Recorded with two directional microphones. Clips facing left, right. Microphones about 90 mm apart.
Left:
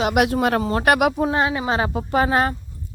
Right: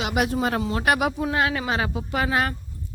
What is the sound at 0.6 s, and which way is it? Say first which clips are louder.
Speech: left 4 dB; 45° left (ahead or behind).